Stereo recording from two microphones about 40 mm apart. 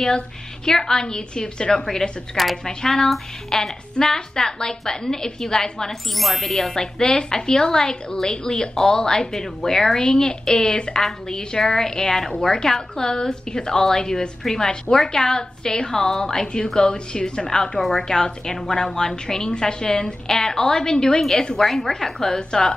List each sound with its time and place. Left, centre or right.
0.7 s a woman's voice: centre
1.9 s a woman's voice: centre
6.1 s a woman's voice: centre
21.2 s a woman's voice: centre